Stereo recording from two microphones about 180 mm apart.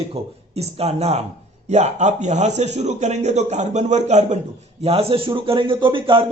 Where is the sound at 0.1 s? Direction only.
35° right (ahead or behind).